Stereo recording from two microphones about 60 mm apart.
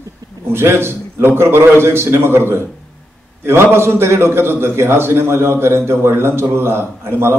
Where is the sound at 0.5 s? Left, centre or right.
Right.